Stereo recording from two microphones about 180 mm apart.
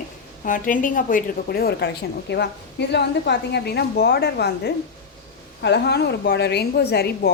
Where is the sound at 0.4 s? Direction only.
50° left (ahead or behind).